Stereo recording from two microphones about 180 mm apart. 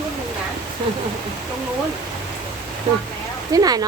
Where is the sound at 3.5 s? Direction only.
20° right (ahead or behind).